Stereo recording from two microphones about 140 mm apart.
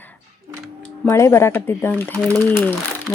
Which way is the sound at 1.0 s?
20° left (ahead or behind).